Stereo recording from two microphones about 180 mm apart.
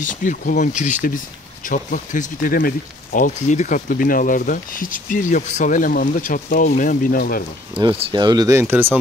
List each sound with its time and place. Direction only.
0.0 s speech: 45° left (ahead or behind)
7.8 s speech: 30° right (ahead or behind); by 8.9 s 10° right (ahead or behind)